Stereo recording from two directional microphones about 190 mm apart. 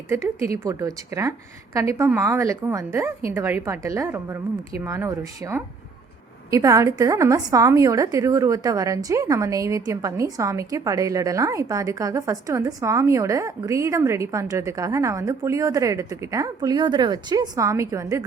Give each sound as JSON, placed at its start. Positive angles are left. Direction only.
{"t": 0.1, "sound": "a woman's voice", "side_deg": -15}